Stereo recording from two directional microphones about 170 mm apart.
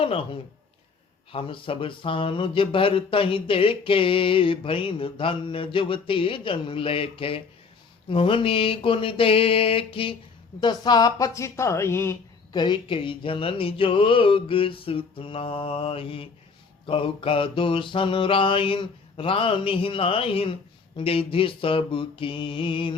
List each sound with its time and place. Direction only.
0.0 s speech: 35° left (ahead or behind)
1.3 s speech: 30° left (ahead or behind); by 12.1 s 15° left (ahead or behind)
12.5 s speech: 25° left (ahead or behind)